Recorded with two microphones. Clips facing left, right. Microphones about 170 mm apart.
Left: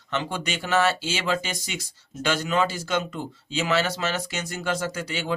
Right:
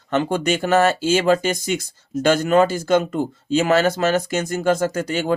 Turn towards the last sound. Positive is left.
turn(degrees=-45)  # may be behind; listen again after turning